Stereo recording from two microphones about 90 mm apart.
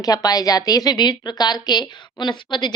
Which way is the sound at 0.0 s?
45° left (ahead or behind).